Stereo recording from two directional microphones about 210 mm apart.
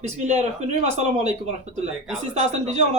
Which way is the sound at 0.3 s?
30° right (ahead or behind).